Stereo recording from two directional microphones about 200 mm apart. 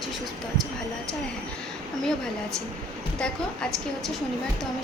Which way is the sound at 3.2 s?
5° left (ahead or behind).